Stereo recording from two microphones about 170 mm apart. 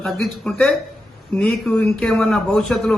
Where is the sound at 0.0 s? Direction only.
Centre (ahead or behind).